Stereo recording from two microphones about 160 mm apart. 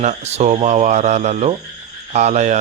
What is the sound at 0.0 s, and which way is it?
A man's voice, 45° right (ahead or behind).